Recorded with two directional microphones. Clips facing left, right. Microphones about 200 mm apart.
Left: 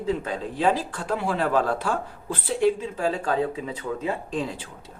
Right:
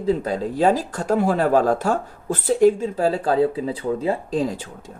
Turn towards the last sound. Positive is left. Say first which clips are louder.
# right 6 dB
turn(degrees=-40)  # may be behind; listen again after turning